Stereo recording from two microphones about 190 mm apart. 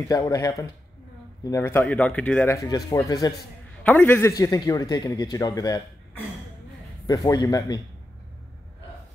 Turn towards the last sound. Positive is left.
turn(degrees=20)  # may be behind; listen again after turning